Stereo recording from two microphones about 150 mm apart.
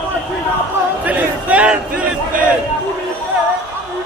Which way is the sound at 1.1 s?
10° right (ahead or behind).